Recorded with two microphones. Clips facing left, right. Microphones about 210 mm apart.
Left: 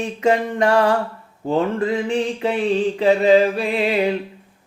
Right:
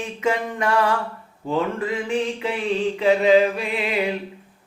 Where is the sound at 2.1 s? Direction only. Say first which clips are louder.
Left 3 dB; 35° left (ahead or behind).